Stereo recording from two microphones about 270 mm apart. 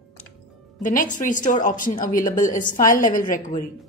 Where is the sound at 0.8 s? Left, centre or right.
Left.